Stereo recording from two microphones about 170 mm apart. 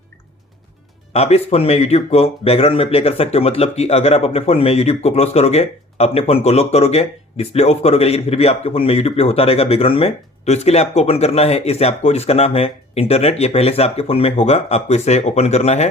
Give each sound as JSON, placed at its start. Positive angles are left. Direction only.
{"t": 1.1, "sound": "speech", "side_deg": 40}